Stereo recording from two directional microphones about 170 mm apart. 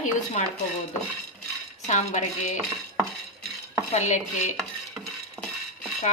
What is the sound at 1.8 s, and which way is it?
Chopping, 45° left (ahead or behind).